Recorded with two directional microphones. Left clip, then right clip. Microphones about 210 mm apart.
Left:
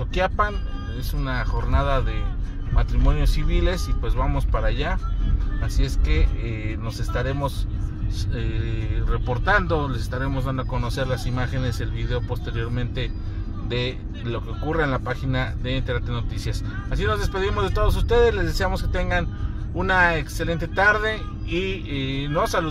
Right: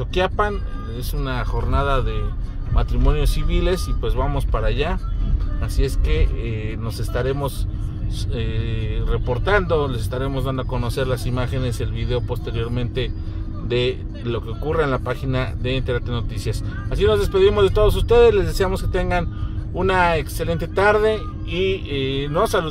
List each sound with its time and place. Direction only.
1.2 s speech: 30° right (ahead or behind)
6.4 s music: centre (ahead or behind)
7.2 s speech: 30° right (ahead or behind)